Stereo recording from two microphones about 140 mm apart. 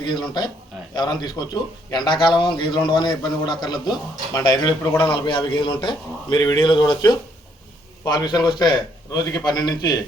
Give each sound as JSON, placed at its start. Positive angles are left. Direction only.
{"t": 0.0, "sound": "a man's voice", "side_deg": 30}